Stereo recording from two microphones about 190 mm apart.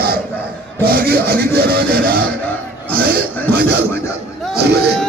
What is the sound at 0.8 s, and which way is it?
Rub, 55° right (ahead or behind).